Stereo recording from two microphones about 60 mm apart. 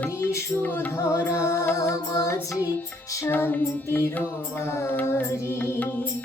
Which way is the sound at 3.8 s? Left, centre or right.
Left.